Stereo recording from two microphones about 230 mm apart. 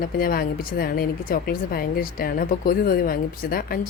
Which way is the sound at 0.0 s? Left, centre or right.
Left.